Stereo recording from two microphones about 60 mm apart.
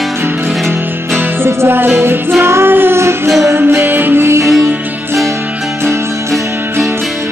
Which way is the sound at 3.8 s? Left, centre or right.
Right.